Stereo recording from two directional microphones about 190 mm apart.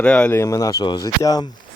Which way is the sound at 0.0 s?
5° left (ahead or behind).